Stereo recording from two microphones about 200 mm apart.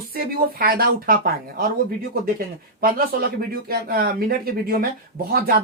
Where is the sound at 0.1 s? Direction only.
50° right (ahead or behind).